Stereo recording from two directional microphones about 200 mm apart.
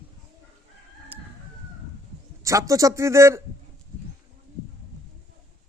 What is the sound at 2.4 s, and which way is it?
A man's voice, 15° right (ahead or behind).